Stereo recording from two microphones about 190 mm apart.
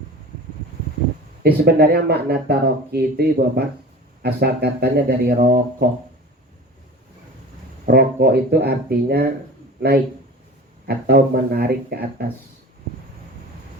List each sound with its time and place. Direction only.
1.4 s speech: 55° right (ahead or behind)
7.9 s speech: 55° right (ahead or behind)
10.8 s speech: 55° right (ahead or behind)